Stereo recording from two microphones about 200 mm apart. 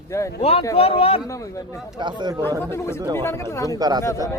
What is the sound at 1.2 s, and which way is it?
Speech, 15° left (ahead or behind).